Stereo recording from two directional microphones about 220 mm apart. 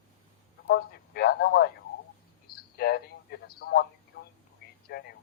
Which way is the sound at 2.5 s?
45° left (ahead or behind).